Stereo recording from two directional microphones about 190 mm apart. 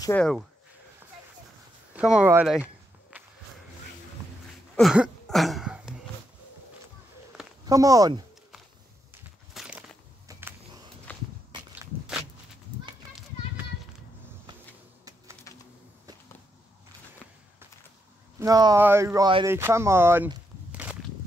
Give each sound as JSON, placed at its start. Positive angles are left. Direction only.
{"t": 2.0, "sound": "walk", "side_deg": -5}
{"t": 4.7, "sound": "throat clearing", "side_deg": -5}
{"t": 7.6, "sound": "speech", "side_deg": -20}
{"t": 9.5, "sound": "walk", "side_deg": -5}
{"t": 11.1, "sound": "walk", "side_deg": 10}
{"t": 11.7, "sound": "walk", "side_deg": -10}
{"t": 15.5, "sound": "bee", "side_deg": 15}
{"t": 18.4, "sound": "speech", "side_deg": -20}
{"t": 20.7, "sound": "walk", "side_deg": -5}